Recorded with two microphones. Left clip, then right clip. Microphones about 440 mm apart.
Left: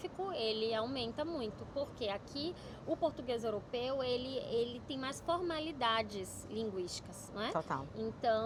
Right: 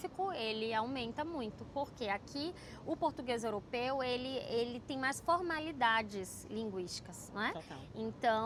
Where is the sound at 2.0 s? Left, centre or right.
Right.